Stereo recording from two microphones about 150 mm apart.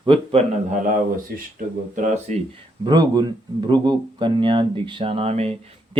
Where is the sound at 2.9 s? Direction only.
30° right (ahead or behind); by 5.5 s 45° right (ahead or behind).